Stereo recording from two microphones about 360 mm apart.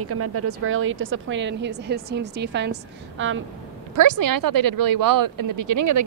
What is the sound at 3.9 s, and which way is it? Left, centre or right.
Speech, right.